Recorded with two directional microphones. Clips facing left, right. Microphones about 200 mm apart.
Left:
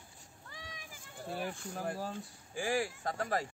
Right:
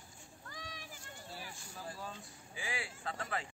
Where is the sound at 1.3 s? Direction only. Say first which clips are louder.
Left 13 dB; 55° left (ahead or behind).